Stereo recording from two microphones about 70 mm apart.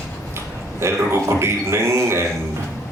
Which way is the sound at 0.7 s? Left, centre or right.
Right.